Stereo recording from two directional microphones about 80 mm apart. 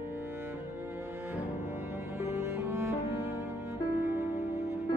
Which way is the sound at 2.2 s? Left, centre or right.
Right.